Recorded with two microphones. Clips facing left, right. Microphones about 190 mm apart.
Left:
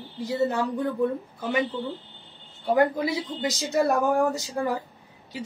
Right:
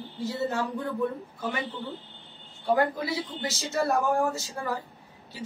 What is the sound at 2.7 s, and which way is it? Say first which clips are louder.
Speech: left 5 dB; 20° left (ahead or behind).